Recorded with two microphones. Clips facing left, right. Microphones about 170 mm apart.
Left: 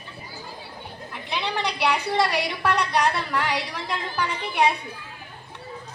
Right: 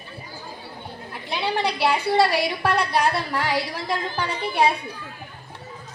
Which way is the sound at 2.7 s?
35° right (ahead or behind).